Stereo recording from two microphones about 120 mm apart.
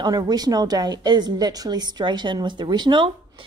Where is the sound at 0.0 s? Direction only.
35° right (ahead or behind).